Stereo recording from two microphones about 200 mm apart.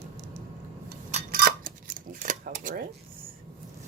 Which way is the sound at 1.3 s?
50° right (ahead or behind).